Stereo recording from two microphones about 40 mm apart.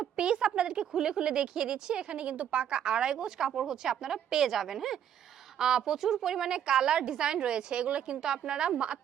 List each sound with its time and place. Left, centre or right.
0.2 s a woman's voice: right